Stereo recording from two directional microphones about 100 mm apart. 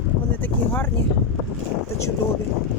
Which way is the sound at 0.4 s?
20° left (ahead or behind).